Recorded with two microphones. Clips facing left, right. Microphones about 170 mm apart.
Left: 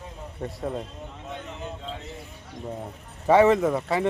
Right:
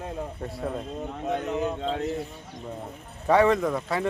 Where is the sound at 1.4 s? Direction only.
65° right (ahead or behind).